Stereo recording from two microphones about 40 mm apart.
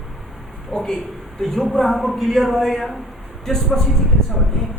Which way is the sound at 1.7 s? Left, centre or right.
Centre.